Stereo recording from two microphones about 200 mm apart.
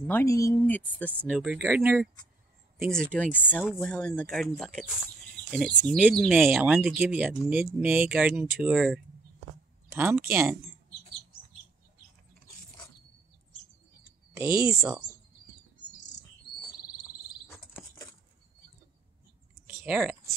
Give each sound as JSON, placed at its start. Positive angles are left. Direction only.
{"t": 0.0, "sound": "speech", "side_deg": 10}
{"t": 1.4, "sound": "speech", "side_deg": -10}
{"t": 2.9, "sound": "speech", "side_deg": 5}
{"t": 14.3, "sound": "speech", "side_deg": -15}
{"t": 19.6, "sound": "a sound", "side_deg": -10}